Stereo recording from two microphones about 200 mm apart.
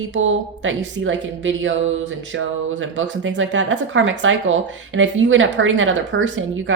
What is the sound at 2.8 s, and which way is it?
Speech, 70° right (ahead or behind).